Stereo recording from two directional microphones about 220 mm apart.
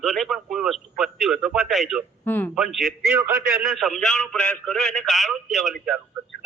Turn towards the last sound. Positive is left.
turn(degrees=0)  # may be behind; listen again after turning